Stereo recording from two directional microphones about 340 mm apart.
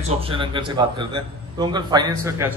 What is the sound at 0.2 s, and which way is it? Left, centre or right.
A man's voice, centre.